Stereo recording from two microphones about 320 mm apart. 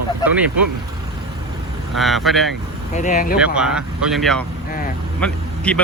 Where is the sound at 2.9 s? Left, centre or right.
Left.